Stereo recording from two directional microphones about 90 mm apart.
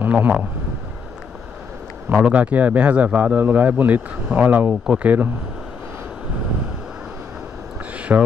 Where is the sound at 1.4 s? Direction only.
20° right (ahead or behind).